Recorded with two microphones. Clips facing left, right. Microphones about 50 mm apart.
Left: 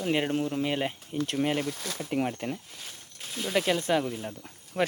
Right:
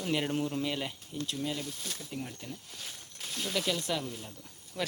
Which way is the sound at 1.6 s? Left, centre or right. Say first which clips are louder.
Left 7 dB; left.